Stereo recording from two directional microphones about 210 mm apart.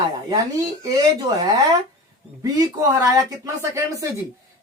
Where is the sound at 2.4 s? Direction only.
15° right (ahead or behind).